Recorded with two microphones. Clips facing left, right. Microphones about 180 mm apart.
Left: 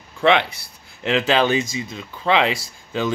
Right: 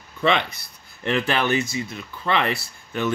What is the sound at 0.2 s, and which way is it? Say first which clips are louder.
Speech: left 4 dB; 65° left (ahead or behind).